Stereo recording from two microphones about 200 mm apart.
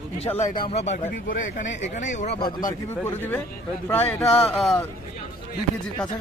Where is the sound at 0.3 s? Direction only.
40° left (ahead or behind).